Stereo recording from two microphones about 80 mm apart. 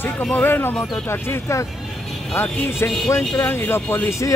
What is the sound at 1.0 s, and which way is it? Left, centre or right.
Speech, left.